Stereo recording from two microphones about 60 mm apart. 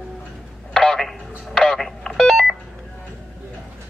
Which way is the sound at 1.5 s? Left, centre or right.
Centre.